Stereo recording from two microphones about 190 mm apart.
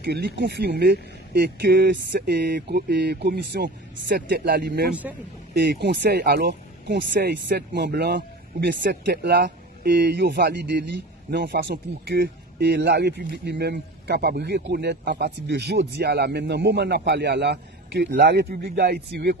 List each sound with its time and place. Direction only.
0.0 s speech: 60° right (ahead or behind)